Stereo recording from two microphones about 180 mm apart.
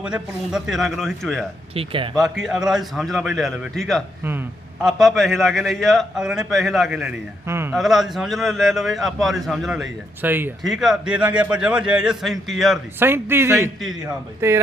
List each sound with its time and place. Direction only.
0.0 s a man's voice: 5° right (ahead or behind)
1.7 s a man's voice: 30° right (ahead or behind)
2.1 s a man's voice: centre (ahead or behind)
7.4 s a sound: 15° right (ahead or behind)
7.7 s a man's voice: centre (ahead or behind)
13.0 s speech: 15° right (ahead or behind)